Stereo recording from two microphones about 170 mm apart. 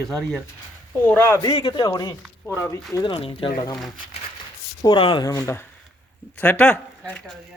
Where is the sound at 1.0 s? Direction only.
15° left (ahead or behind); by 3.5 s 30° left (ahead or behind).